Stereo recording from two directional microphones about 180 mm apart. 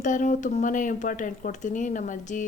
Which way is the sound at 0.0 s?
45° left (ahead or behind).